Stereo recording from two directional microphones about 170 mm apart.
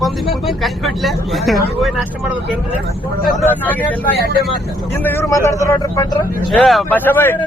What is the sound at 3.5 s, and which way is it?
Speech, 10° left (ahead or behind).